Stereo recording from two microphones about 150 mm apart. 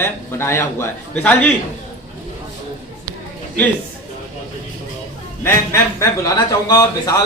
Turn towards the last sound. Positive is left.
turn(degrees=25)  # may be behind; listen again after turning